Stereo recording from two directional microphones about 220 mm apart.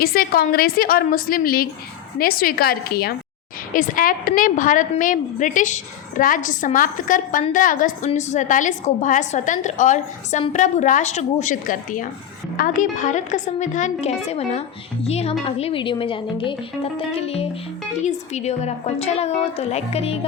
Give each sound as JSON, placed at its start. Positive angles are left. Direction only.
{"t": 0.0, "sound": "a woman's voice", "side_deg": 45}